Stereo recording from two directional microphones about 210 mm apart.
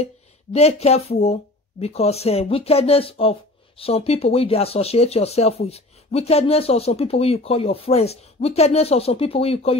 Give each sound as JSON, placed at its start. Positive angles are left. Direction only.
{"t": 0.0, "sound": "speech", "side_deg": 30}